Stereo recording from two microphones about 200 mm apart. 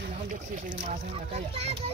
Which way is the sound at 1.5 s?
30° right (ahead or behind).